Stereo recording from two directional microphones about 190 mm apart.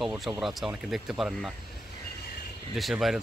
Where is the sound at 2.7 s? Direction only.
Centre (ahead or behind).